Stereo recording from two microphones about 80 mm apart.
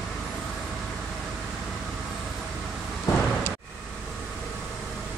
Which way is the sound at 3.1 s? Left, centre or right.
Left.